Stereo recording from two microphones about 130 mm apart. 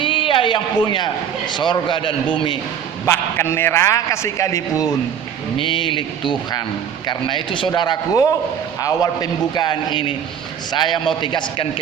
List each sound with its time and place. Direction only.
0.0 s a sound: 40° left (ahead or behind)
1.5 s a man's voice: 35° left (ahead or behind)
3.1 s a man's voice: 20° left (ahead or behind)
5.5 s a man's voice: 40° left (ahead or behind)